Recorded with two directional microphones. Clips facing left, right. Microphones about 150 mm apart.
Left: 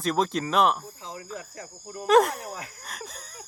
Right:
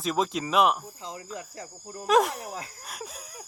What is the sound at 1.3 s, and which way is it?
Speech, 25° right (ahead or behind).